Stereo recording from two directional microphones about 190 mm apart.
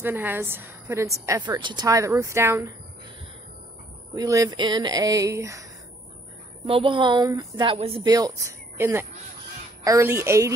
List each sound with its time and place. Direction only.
0.0 s a woman's voice: 10° right (ahead or behind)
4.1 s a woman's voice: 20° right (ahead or behind)
6.6 s a woman's voice: 30° right (ahead or behind)